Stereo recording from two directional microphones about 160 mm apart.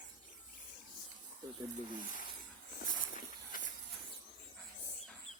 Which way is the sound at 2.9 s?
60° left (ahead or behind).